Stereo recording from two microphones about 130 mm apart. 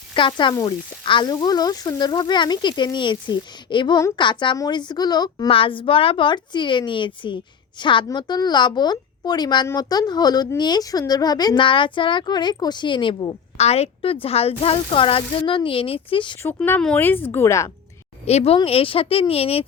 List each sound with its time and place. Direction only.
0.1 s speech: 40° left (ahead or behind)
5.5 s speech: 45° left (ahead or behind)
13.6 s a woman's voice: 55° left (ahead or behind)
16.4 s speech: 15° left (ahead or behind)
18.3 s a woman's voice: 50° left (ahead or behind)